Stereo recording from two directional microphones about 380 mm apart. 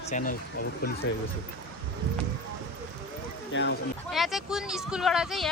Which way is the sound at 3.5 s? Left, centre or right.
Left.